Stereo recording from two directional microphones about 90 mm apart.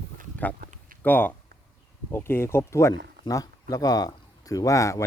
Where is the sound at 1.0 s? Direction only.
20° left (ahead or behind).